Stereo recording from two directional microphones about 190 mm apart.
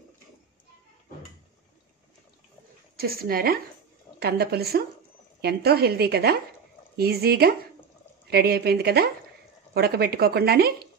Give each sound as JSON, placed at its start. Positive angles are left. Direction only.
{"t": 3.0, "sound": "a woman's voice", "side_deg": -50}